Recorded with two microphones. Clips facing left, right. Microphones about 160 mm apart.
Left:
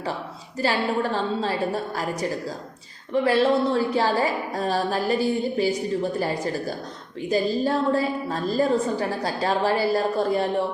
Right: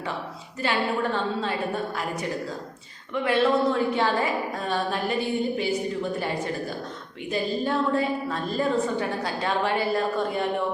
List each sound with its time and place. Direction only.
0.6 s a woman's voice: 35° left (ahead or behind)
3.1 s a woman's voice: 35° left (ahead or behind)